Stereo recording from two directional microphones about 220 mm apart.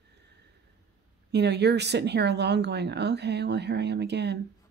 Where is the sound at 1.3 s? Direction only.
50° right (ahead or behind).